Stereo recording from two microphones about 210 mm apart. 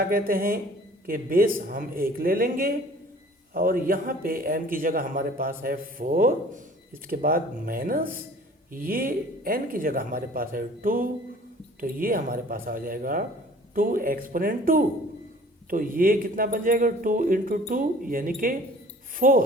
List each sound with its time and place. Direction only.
0.0 s a man's voice: 45° right (ahead or behind)